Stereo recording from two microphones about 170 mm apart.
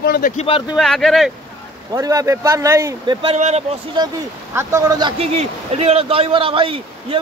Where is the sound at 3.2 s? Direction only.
40° right (ahead or behind).